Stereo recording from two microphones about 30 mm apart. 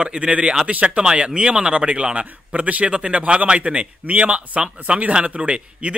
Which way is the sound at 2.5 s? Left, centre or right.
Right.